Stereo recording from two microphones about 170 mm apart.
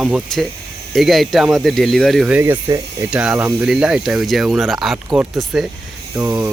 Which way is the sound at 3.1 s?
5° right (ahead or behind).